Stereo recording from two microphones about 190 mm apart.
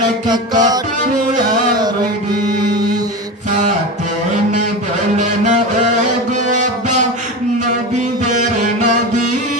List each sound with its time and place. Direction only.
0.3 s music: 20° right (ahead or behind)
5.1 s a sound: 40° right (ahead or behind)
6.3 s music: 40° right (ahead or behind)